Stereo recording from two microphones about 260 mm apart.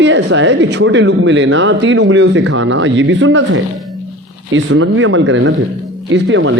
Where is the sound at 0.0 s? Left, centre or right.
Right.